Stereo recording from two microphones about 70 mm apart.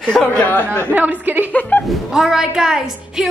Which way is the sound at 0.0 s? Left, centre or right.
Centre.